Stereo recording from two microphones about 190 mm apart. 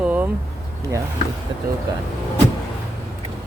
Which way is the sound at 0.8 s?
15° right (ahead or behind).